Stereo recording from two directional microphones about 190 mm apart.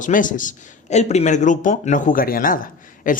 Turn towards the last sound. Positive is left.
turn(degrees=45)  # may be behind; listen again after turning